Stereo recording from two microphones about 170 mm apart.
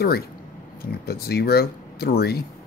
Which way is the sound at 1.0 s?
65° left (ahead or behind).